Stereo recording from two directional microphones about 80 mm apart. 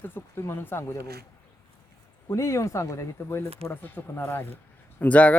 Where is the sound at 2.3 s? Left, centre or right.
Left.